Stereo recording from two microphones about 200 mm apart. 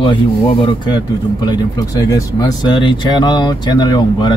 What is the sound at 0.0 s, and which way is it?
Speech, 25° left (ahead or behind).